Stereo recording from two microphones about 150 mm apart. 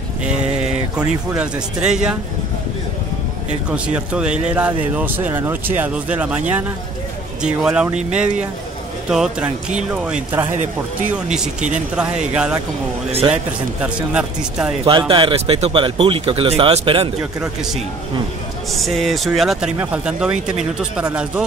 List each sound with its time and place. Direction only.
0.9 s speech: 5° right (ahead or behind)
3.7 s speech: 5° right (ahead or behind)
13.8 s speech: 5° right (ahead or behind)
14.9 s speech: 35° right (ahead or behind)
18.7 s speech: centre (ahead or behind)